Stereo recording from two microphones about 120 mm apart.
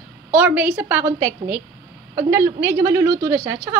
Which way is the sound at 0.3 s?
15° right (ahead or behind).